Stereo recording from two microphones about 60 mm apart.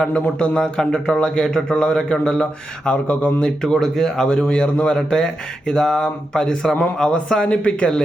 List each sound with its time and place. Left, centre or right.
0.0 s a man's voice: centre
3.6 s a man's voice: centre